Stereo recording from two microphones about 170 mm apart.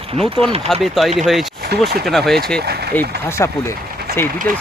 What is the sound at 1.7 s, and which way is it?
Speech, 70° right (ahead or behind).